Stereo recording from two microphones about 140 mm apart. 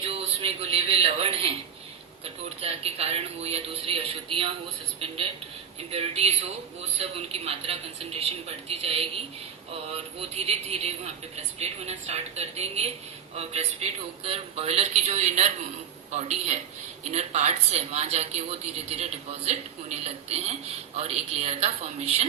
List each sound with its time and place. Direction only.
0.0 s speech: 45° right (ahead or behind)
2.6 s speech: 45° right (ahead or behind)